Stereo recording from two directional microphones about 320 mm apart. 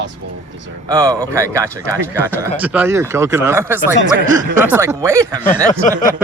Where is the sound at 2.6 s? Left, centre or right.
Centre.